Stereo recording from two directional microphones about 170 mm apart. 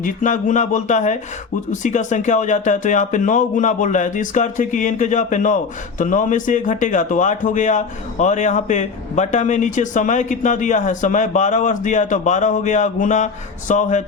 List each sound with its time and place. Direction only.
0.0 s speech: 50° left (ahead or behind)